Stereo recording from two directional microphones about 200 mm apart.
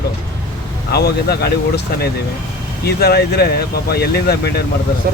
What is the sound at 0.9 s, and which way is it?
Speech, 55° left (ahead or behind).